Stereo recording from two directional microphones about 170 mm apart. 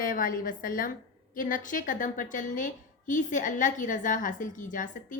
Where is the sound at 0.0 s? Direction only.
55° left (ahead or behind).